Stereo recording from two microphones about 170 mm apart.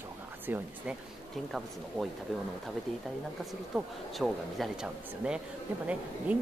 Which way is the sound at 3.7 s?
Centre (ahead or behind).